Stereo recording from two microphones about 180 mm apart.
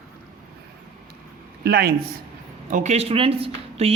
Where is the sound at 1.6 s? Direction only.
60° right (ahead or behind).